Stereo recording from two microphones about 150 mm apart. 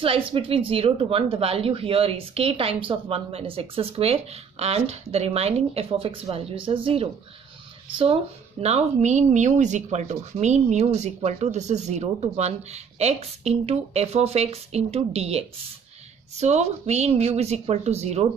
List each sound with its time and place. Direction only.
0.0 s speech: 35° right (ahead or behind)